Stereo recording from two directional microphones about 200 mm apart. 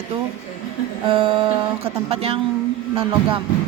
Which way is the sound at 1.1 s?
25° right (ahead or behind).